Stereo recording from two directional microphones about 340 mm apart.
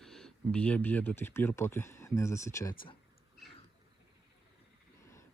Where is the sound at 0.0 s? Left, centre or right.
Centre.